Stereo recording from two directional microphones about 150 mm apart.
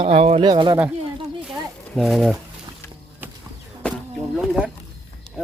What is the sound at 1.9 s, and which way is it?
Speech, centre (ahead or behind).